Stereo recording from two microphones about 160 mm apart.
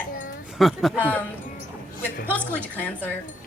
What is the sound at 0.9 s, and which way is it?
Speech, 10° left (ahead or behind).